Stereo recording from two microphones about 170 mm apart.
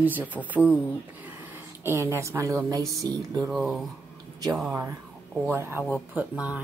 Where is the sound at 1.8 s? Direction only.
15° right (ahead or behind).